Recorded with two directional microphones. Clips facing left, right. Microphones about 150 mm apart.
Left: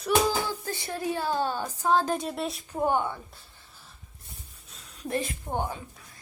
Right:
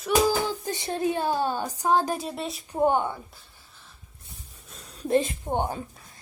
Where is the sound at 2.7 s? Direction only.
20° right (ahead or behind).